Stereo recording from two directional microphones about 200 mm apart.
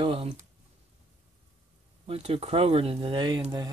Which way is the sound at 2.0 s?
30° right (ahead or behind).